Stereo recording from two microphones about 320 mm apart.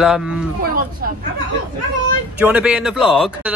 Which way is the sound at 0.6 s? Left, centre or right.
Right.